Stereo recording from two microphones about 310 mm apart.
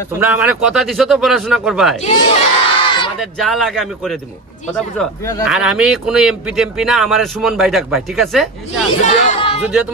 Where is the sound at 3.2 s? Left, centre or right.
Centre.